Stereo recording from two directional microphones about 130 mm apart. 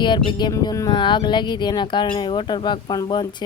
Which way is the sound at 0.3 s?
35° left (ahead or behind).